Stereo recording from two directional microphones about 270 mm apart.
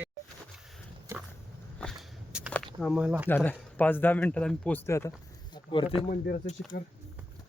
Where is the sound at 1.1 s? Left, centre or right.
Centre.